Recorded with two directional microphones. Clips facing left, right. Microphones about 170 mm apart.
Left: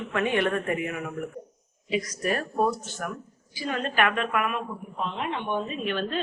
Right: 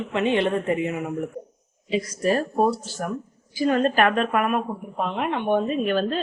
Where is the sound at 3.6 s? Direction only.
45° right (ahead or behind).